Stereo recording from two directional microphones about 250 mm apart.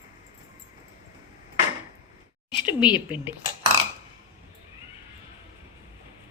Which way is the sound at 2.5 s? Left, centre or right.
Centre.